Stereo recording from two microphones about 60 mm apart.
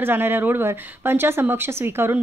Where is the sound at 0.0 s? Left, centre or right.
Right.